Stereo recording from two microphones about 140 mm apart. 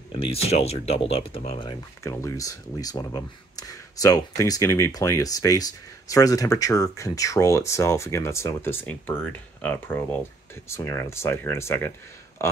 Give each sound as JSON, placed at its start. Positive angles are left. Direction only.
{"t": 0.2, "sound": "speech", "side_deg": 45}
{"t": 1.7, "sound": "speech", "side_deg": 20}